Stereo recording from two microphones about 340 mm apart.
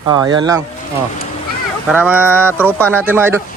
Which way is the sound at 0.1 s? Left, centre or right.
Centre.